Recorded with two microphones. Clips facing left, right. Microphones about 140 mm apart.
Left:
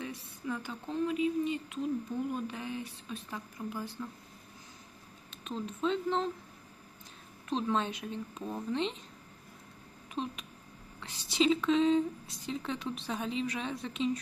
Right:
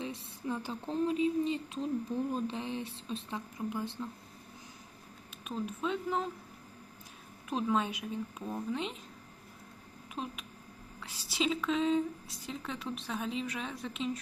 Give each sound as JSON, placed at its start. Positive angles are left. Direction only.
{"t": 0.0, "sound": "a woman's voice", "side_deg": -25}
{"t": 5.5, "sound": "a woman's voice", "side_deg": -10}
{"t": 7.5, "sound": "a woman's voice", "side_deg": -10}
{"t": 10.2, "sound": "a woman's voice", "side_deg": -5}